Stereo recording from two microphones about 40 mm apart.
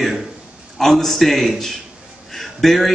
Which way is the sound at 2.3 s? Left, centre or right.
Centre.